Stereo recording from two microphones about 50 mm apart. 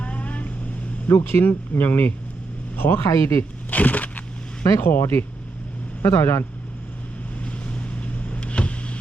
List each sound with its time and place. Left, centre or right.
0.0 s vehicle: left
1.0 s speech: left
1.8 s speech: left
3.1 s speech: left
3.7 s a sound: left
4.8 s speech: left
6.0 s speech: left
7.4 s vehicle: left